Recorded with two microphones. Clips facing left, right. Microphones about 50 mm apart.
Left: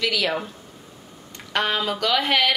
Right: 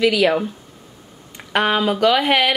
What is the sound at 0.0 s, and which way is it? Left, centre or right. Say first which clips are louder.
Speech: right 8 dB; centre.